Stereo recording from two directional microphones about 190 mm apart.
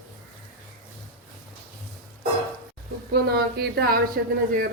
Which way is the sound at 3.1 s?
55° right (ahead or behind).